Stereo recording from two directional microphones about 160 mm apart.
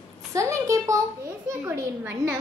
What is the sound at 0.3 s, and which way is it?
A child's voice, 20° right (ahead or behind).